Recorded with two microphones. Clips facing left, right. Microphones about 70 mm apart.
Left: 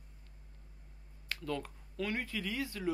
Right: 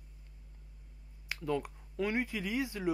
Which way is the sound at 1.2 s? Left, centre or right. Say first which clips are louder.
Right 4 dB; centre.